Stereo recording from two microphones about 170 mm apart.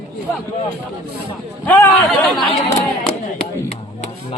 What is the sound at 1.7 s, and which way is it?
Speech, 10° left (ahead or behind).